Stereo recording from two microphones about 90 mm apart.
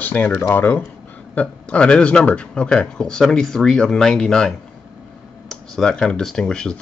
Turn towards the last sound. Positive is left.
turn(degrees=10)  # may be behind; listen again after turning